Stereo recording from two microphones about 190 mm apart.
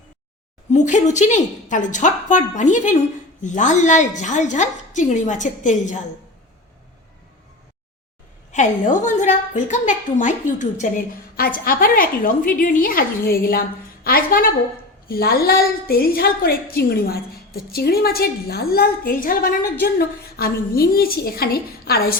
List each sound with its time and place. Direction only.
0.7 s a woman's voice: 40° left (ahead or behind)
8.5 s a woman's voice: 40° left (ahead or behind)